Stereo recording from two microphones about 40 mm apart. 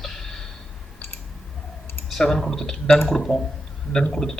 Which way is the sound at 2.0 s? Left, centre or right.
Centre.